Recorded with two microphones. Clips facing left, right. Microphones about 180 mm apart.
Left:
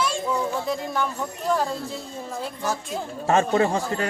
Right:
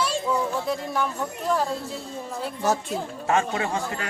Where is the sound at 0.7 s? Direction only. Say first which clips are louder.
Even; 5° right (ahead or behind).